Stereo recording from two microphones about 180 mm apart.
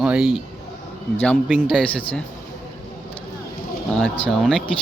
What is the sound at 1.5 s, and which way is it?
Speech, 5° left (ahead or behind).